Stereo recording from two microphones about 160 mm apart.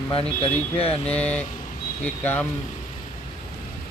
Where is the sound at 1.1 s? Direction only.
10° left (ahead or behind).